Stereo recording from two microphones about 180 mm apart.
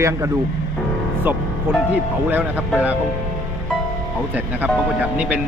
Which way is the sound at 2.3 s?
10° right (ahead or behind).